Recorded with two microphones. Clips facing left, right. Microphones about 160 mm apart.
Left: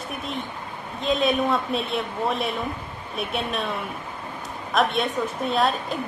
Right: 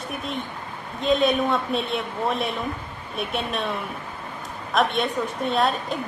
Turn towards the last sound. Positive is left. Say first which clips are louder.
# even
turn(degrees=0)  # may be behind; listen again after turning